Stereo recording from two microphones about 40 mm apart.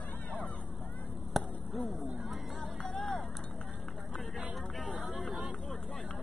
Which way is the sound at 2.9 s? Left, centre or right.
Centre.